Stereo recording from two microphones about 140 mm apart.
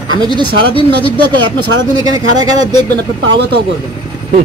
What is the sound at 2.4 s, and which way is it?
Speech, 30° right (ahead or behind).